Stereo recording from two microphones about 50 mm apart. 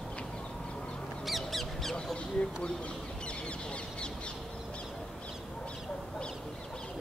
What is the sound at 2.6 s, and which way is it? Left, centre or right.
Bird, left.